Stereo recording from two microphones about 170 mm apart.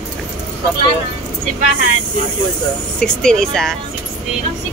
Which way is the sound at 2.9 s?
5° left (ahead or behind).